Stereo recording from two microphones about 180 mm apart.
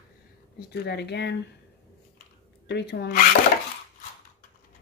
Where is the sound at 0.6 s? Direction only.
65° left (ahead or behind).